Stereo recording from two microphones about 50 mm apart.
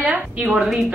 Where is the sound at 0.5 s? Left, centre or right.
Centre.